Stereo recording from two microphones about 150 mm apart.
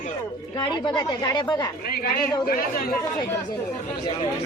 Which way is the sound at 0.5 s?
30° left (ahead or behind).